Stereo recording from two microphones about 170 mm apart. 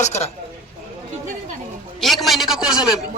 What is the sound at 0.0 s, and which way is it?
Speech, 40° left (ahead or behind).